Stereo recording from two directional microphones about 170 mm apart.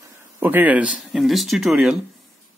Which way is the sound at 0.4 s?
10° right (ahead or behind).